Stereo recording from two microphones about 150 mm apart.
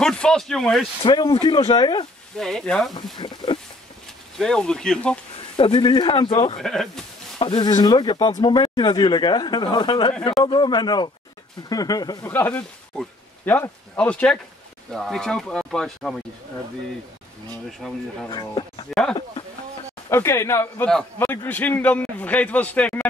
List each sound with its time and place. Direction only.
0.0 s speech: 5° left (ahead or behind)
1.0 s speech: 35° left (ahead or behind)
2.3 s speech: 5° left (ahead or behind)
3.2 s speech: 30° left (ahead or behind)
4.4 s speech: 5° left (ahead or behind)
5.6 s speech: 35° left (ahead or behind)
6.6 s speech: centre (ahead or behind)
7.3 s speech: 35° left (ahead or behind)
12.3 s a man's voice: 10° left (ahead or behind)
17.6 s speech: centre (ahead or behind)
18.3 s speech: 30° left (ahead or behind)
20.1 s a man's voice: 20° left (ahead or behind)